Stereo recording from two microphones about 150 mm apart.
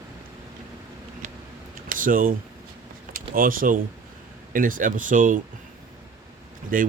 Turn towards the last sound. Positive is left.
turn(degrees=-65)  # may be behind; listen again after turning